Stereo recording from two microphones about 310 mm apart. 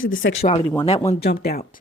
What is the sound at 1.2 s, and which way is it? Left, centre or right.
Speech, left.